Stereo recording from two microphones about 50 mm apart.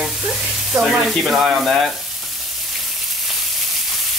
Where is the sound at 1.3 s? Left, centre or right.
Centre.